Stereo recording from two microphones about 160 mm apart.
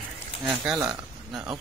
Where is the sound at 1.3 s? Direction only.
5° right (ahead or behind).